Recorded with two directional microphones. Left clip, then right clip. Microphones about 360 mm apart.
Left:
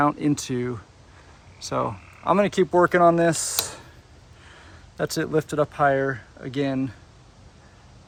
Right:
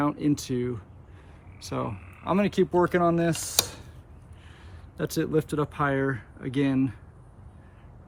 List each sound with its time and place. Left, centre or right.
0.0 s speech: centre